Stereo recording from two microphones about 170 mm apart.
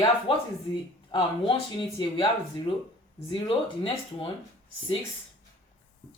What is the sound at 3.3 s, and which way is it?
Speech, 30° left (ahead or behind).